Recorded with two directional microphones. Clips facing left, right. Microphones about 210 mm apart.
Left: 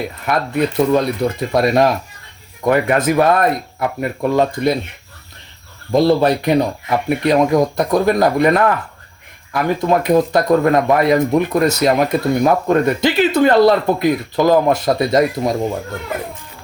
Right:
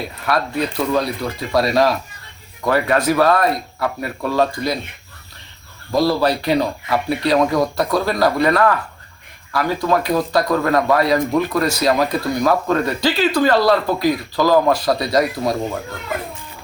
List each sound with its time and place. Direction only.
0.3 s speech: 20° left (ahead or behind)
5.9 s speech: 20° left (ahead or behind)